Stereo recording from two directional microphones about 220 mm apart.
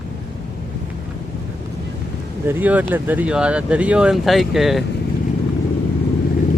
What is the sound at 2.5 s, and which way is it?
Speech, 5° right (ahead or behind).